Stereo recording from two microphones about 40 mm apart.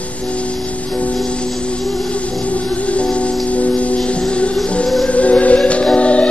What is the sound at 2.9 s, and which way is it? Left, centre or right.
Music, left.